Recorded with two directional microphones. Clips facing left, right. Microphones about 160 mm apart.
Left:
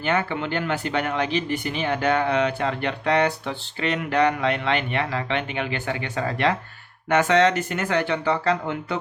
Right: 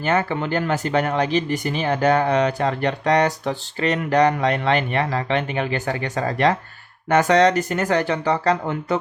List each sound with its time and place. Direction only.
0.0 s speech: 40° right (ahead or behind)